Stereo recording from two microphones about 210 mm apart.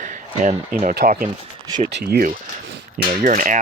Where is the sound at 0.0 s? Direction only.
35° right (ahead or behind).